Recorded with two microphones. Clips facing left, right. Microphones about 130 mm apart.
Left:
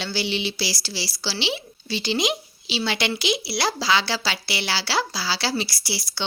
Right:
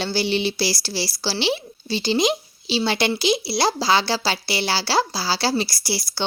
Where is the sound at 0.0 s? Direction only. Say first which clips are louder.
Right 5 dB; 40° right (ahead or behind).